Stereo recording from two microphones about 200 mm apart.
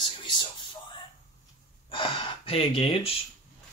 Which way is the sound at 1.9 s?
25° left (ahead or behind).